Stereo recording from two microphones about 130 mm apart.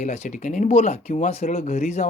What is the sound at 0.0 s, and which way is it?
Speech, 60° left (ahead or behind).